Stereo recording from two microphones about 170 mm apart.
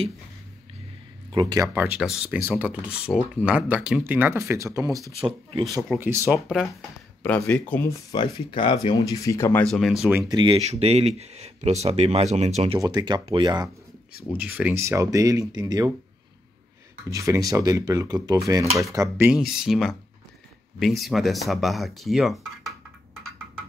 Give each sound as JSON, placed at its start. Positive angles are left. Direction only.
{"t": 1.3, "sound": "speech", "side_deg": -20}
{"t": 5.2, "sound": "speech", "side_deg": -30}
{"t": 5.9, "sound": "speech", "side_deg": -15}
{"t": 7.2, "sound": "speech", "side_deg": 10}
{"t": 8.1, "sound": "speech", "side_deg": 25}
{"t": 9.7, "sound": "speech", "side_deg": 0}
{"t": 10.3, "sound": "speech", "side_deg": -30}
{"t": 12.7, "sound": "speech", "side_deg": -20}
{"t": 14.3, "sound": "speech", "side_deg": -10}
{"t": 17.1, "sound": "speech", "side_deg": -20}